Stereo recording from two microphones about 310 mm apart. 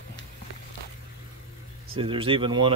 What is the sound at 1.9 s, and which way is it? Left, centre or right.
Speech, centre.